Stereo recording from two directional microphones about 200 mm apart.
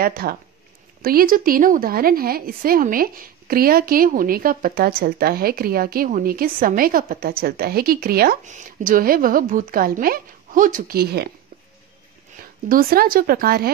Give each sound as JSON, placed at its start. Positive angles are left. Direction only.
{"t": 0.0, "sound": "speech", "side_deg": -45}
{"t": 12.6, "sound": "speech", "side_deg": -45}